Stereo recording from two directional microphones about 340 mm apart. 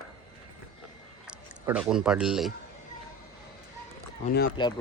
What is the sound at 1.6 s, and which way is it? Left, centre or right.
Speech, centre.